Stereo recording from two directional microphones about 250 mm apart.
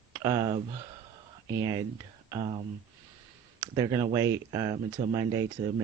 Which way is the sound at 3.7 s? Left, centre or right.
Centre.